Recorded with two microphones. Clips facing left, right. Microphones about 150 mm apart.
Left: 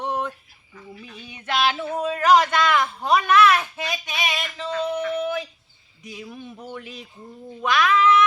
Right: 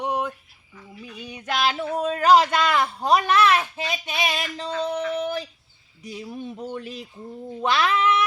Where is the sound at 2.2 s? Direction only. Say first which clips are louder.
Even; 30° right (ahead or behind).